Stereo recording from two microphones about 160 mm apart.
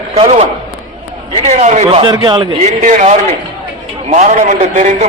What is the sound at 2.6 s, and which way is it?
Speech, 50° right (ahead or behind).